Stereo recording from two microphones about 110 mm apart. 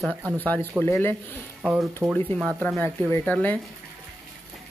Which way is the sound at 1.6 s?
5° right (ahead or behind).